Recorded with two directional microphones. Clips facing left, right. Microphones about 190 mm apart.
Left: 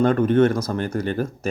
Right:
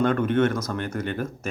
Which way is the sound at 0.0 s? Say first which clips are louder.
Left 4 dB; 35° left (ahead or behind).